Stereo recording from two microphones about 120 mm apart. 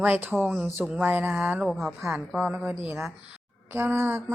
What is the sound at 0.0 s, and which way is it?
Speech, 15° right (ahead or behind).